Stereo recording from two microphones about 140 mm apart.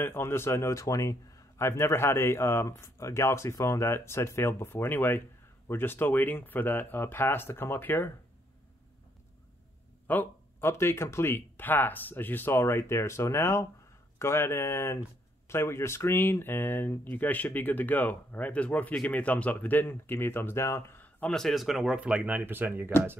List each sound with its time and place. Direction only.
0.0 s speech: 15° left (ahead or behind)
10.0 s speech: 15° left (ahead or behind); by 22.8 s 15° right (ahead or behind)